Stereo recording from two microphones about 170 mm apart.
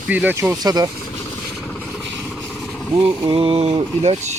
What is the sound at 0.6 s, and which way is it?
Speech, 25° right (ahead or behind).